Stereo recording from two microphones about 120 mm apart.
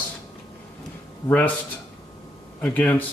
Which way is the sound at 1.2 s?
15° left (ahead or behind).